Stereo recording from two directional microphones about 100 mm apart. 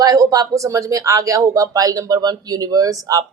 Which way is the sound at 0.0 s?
35° right (ahead or behind).